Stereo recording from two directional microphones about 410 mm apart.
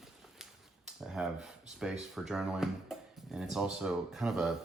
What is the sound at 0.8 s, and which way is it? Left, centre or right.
Speech, centre.